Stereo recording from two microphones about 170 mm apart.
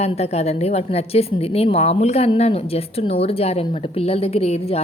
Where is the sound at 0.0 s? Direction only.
40° left (ahead or behind).